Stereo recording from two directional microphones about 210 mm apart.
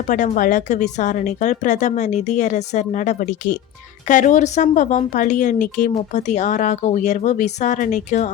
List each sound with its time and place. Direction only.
0.1 s a woman's voice: 40° left (ahead or behind)